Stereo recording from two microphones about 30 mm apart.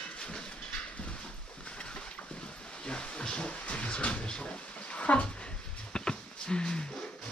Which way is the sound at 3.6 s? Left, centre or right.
Left.